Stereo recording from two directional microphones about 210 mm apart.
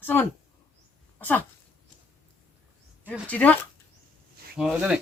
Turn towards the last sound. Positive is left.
turn(degrees=-5)  # may be behind; listen again after turning